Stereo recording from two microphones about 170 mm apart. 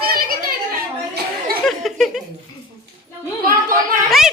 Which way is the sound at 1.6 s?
Centre (ahead or behind).